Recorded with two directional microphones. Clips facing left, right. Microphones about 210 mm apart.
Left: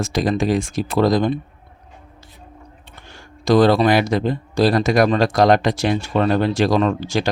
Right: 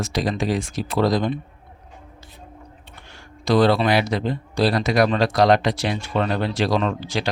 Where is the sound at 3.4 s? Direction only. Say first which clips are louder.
Left 4 dB; 45° left (ahead or behind).